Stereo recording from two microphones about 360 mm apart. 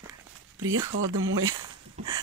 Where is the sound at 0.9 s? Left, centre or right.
Right.